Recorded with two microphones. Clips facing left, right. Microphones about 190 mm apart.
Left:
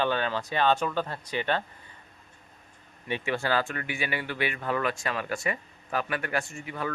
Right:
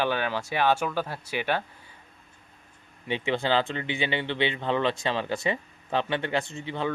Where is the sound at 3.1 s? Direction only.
20° right (ahead or behind).